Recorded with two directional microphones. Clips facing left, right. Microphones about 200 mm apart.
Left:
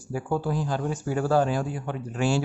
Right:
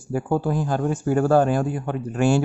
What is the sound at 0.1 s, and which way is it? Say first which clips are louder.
Speech: right 5 dB; 50° right (ahead or behind).